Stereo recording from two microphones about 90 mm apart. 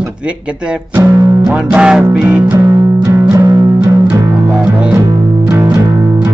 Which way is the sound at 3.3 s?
40° right (ahead or behind).